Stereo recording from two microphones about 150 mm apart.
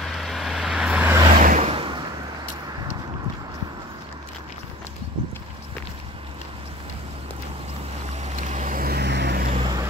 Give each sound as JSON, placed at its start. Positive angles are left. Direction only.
{"t": 0.0, "sound": "vehicle", "side_deg": 0}
{"t": 1.4, "sound": "vehicle", "side_deg": -60}
{"t": 1.7, "sound": "a sound", "side_deg": -35}
{"t": 8.2, "sound": "vehicle", "side_deg": -50}
{"t": 9.5, "sound": "vehicle", "side_deg": -35}